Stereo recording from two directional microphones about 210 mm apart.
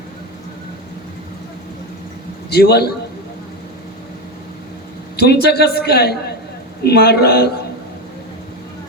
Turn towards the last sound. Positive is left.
turn(degrees=50)  # may be behind; listen again after turning